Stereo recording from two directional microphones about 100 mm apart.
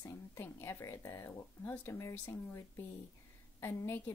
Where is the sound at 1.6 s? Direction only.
15° left (ahead or behind).